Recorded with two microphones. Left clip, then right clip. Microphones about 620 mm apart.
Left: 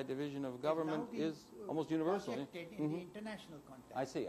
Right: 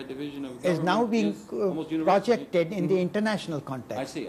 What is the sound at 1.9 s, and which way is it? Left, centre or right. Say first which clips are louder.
Speech: right 8 dB; left.